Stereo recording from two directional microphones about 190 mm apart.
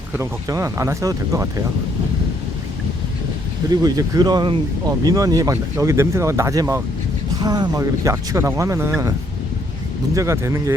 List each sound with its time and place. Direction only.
0.1 s speech: 15° right (ahead or behind)
3.7 s speech: 20° right (ahead or behind)
10.2 s speech: 15° right (ahead or behind)